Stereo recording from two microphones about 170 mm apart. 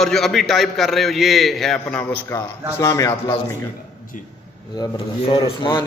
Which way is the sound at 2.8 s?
15° left (ahead or behind).